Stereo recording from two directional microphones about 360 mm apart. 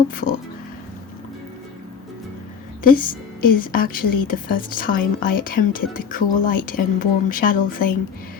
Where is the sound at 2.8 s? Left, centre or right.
Left.